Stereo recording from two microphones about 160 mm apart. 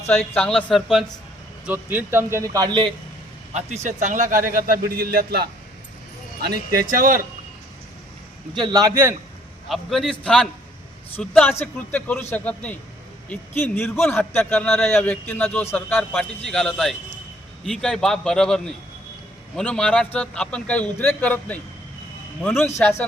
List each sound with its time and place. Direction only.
0.1 s a man's voice: 5° left (ahead or behind)
1.6 s a man's voice: 10° right (ahead or behind)
3.8 s speech: 50° right (ahead or behind); by 6.8 s 80° right
6.9 s speech: 60° right (ahead or behind)
8.5 s a man's voice: 25° right (ahead or behind)
9.6 s a man's voice: centre (ahead or behind)
16.5 s a man's voice: centre (ahead or behind)